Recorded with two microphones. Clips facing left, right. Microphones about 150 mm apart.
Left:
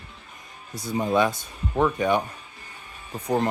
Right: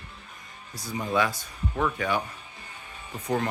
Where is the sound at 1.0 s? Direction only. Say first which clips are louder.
Left 4 dB; 25° left (ahead or behind).